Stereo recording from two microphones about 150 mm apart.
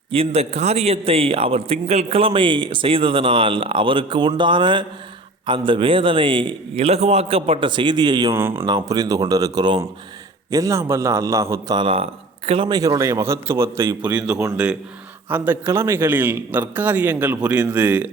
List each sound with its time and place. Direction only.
0.1 s a man's voice: 40° right (ahead or behind)
8.4 s a man's voice: 15° right (ahead or behind)
8.6 s a man's voice: 25° right (ahead or behind)
11.8 s a man's voice: 40° right (ahead or behind); by 18.1 s 10° right (ahead or behind)